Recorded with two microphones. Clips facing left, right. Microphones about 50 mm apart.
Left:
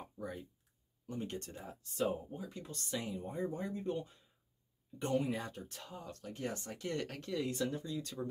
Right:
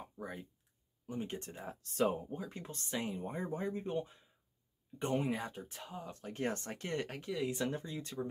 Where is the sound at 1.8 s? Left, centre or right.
Right.